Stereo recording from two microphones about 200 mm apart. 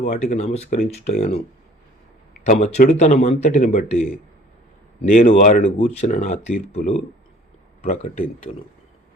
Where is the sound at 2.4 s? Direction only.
35° left (ahead or behind).